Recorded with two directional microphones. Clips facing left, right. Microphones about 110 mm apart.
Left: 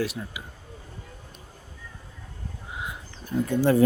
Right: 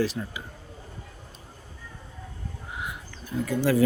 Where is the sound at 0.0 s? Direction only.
5° left (ahead or behind).